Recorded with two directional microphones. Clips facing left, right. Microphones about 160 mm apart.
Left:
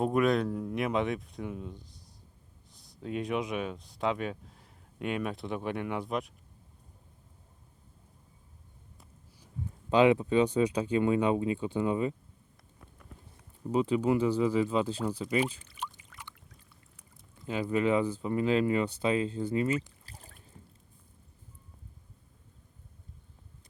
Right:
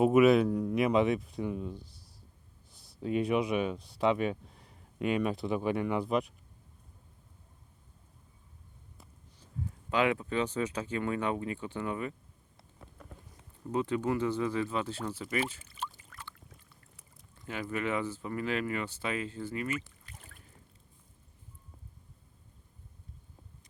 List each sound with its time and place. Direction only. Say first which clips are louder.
0.0 s speech: right 4 dB; 5° right (ahead or behind)
9.9 s speech: left 6 dB; 20° left (ahead or behind)
13.7 s speech: left 4 dB; 15° left (ahead or behind)
15.8 s boat: even; 15° left (ahead or behind)
17.4 s speech: left 6 dB; 20° left (ahead or behind)